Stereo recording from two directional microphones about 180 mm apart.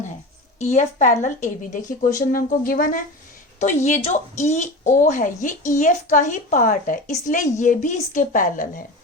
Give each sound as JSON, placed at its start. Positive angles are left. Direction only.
{"t": 0.6, "sound": "a woman's voice", "side_deg": 40}
{"t": 3.8, "sound": "speech", "side_deg": 40}